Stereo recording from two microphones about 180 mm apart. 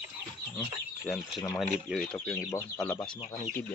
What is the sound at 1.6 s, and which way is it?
Speech, centre (ahead or behind).